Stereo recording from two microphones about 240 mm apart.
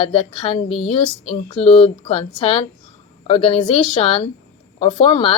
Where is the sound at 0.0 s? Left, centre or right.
Left.